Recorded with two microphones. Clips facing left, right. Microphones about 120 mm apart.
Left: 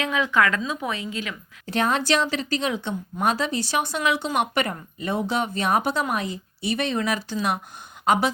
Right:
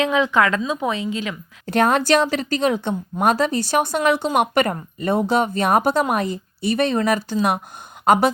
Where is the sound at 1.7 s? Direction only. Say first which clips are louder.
Right 6 dB; 55° right (ahead or behind).